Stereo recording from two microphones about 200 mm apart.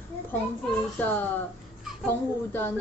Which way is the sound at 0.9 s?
10° left (ahead or behind).